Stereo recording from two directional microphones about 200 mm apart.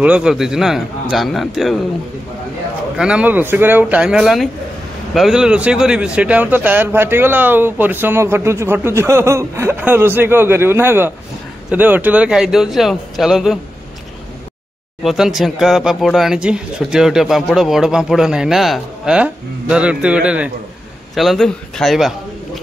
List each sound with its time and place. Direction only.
0.0 s speech: 5° right (ahead or behind)
3.0 s speech: 5° right (ahead or behind)
15.0 s speech: centre (ahead or behind)